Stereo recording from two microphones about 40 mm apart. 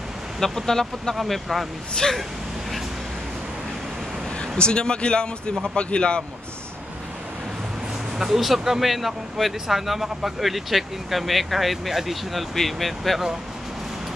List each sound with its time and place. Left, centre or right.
0.4 s speech: centre
1.1 s speech: centre
2.0 s speech: left
4.4 s speech: left
8.2 s speech: centre